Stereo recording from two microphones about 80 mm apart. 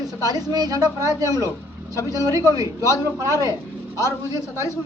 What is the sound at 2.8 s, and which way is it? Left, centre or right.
Speech, left.